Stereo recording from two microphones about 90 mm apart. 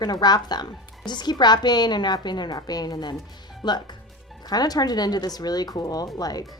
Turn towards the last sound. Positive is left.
turn(degrees=45)  # may be behind; listen again after turning